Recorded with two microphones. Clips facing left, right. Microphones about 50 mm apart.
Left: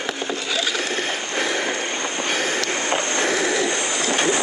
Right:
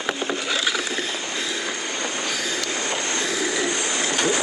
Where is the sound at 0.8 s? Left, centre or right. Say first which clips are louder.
Left 2 dB; left.